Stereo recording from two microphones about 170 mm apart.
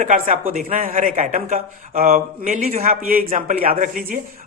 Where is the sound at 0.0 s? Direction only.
50° right (ahead or behind).